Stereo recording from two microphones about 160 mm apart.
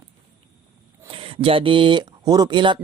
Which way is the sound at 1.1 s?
35° right (ahead or behind).